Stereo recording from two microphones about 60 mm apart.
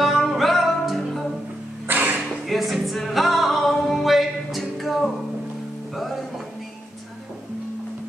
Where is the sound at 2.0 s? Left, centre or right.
Right.